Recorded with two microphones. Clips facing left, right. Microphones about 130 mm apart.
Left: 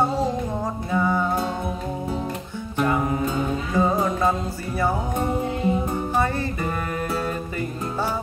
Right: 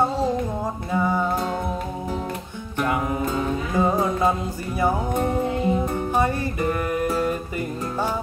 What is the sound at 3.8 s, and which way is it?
Music, 15° right (ahead or behind).